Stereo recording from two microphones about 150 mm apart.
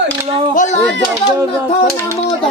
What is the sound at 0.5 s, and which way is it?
Speech, 55° left (ahead or behind).